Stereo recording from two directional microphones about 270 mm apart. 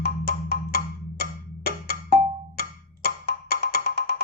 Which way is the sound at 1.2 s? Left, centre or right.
Left.